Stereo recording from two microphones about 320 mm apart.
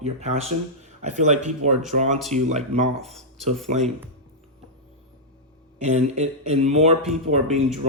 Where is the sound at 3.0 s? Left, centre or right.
Centre.